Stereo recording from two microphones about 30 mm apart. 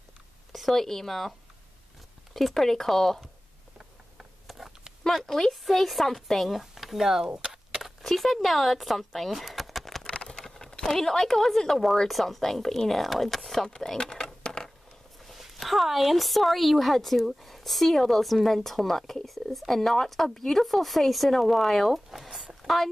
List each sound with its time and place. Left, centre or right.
0.5 s a sound: centre
0.7 s speech: centre
2.3 s speech: centre
4.5 s a sound: centre
5.0 s speech: centre
6.6 s speech: centre
7.3 s a sound: right
8.0 s speech: centre
10.6 s speech: centre
13.7 s a sound: left
15.3 s a woman's voice: centre
21.9 s speech: centre